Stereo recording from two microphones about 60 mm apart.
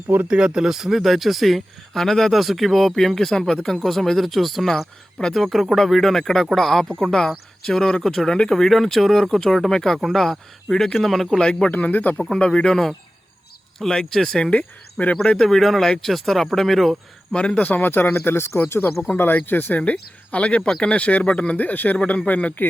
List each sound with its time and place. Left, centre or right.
0.3 s speech: centre
11.3 s speech: centre
11.7 s speech: left
12.4 s speech: centre
15.4 s speech: centre
17.5 s a man's voice: left